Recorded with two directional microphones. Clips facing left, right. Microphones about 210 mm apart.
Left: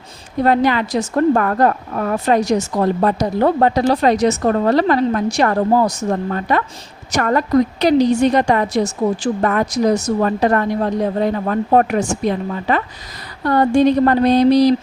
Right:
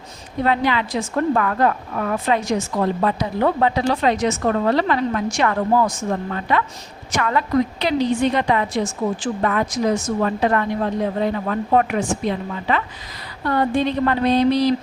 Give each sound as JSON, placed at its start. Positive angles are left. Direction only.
{"t": 0.4, "sound": "a woman's voice", "side_deg": 45}